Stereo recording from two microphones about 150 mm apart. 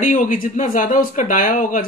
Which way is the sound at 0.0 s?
60° left (ahead or behind).